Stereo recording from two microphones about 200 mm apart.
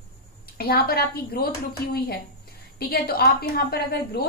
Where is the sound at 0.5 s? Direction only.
50° left (ahead or behind).